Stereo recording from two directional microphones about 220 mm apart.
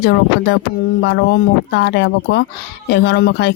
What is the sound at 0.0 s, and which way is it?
Speech, 55° left (ahead or behind).